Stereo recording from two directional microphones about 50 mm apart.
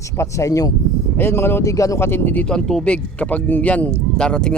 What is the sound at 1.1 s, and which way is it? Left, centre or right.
Speech, left.